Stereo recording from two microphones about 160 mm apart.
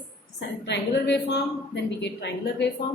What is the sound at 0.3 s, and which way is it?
A woman's voice, 90° left.